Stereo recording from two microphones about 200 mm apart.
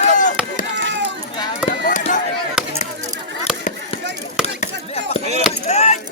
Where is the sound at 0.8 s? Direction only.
60° right (ahead or behind).